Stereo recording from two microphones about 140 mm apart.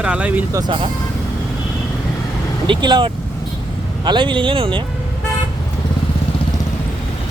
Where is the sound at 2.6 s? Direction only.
35° right (ahead or behind).